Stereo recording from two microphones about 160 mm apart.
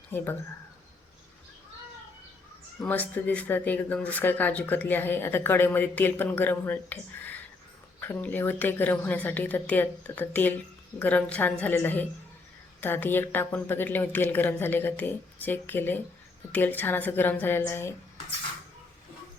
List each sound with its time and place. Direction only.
2.7 s speech: 10° left (ahead or behind)